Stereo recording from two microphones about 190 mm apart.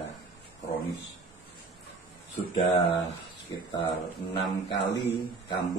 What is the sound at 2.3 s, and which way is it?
Speech, 35° left (ahead or behind).